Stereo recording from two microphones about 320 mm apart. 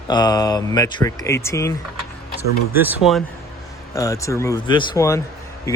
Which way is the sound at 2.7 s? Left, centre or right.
Centre.